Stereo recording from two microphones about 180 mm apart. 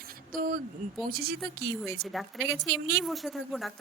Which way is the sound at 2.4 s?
15° right (ahead or behind).